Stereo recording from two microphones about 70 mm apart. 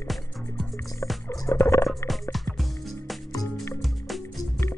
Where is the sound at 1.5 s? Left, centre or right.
Left.